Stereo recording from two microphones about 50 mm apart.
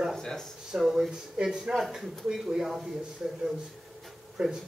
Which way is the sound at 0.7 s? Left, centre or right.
Centre.